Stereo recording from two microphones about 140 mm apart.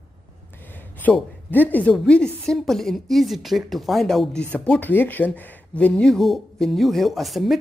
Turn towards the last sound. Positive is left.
turn(degrees=0)  # may be behind; listen again after turning